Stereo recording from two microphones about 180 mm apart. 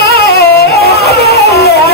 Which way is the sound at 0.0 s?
65° left (ahead or behind).